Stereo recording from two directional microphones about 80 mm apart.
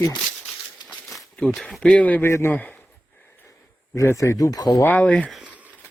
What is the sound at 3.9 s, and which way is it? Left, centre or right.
Speech, left.